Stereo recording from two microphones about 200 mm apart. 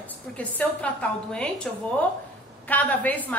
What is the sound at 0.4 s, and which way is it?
A woman's voice, 5° left (ahead or behind).